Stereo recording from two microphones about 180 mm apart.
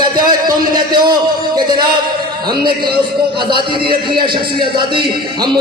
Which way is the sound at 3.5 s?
25° right (ahead or behind).